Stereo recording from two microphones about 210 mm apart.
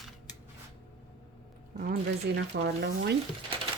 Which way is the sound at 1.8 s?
50° right (ahead or behind).